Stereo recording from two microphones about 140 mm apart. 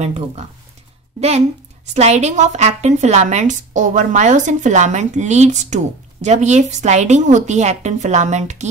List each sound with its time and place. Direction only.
0.0 s speech: 55° right (ahead or behind)
2.0 s a woman's voice: 55° right (ahead or behind)